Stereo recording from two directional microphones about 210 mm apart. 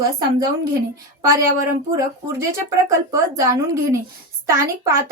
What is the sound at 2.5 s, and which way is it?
Speech, 15° right (ahead or behind).